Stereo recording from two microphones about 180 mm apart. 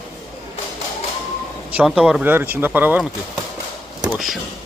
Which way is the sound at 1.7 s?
5° right (ahead or behind).